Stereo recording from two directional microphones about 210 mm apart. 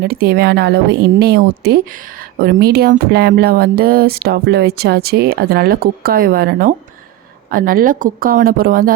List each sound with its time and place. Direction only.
0.0 s speech: 45° right (ahead or behind)